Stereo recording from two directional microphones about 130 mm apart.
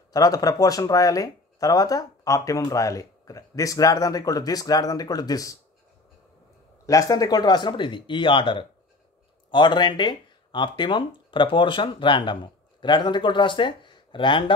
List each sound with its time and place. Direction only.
0.1 s speech: 30° left (ahead or behind)
6.9 s speech: 25° left (ahead or behind)